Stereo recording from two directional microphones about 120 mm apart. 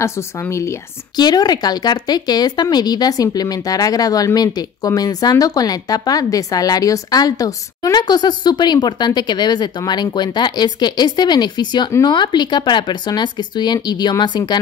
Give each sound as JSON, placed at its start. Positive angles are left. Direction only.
{"t": 0.0, "sound": "speech", "side_deg": 25}
{"t": 1.2, "sound": "speech", "side_deg": 35}